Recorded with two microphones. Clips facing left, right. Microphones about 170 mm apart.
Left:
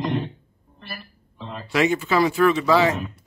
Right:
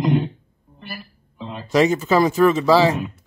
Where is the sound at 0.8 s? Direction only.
15° right (ahead or behind).